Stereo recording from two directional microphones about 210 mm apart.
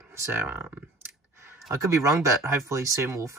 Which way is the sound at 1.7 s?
15° right (ahead or behind).